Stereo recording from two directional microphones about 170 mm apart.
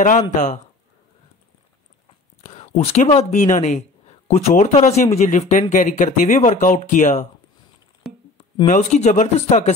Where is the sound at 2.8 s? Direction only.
35° left (ahead or behind).